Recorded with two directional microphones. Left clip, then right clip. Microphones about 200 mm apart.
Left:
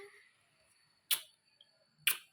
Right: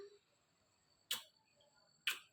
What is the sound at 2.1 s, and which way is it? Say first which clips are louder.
Camera: left 7 dB; 5° left (ahead or behind).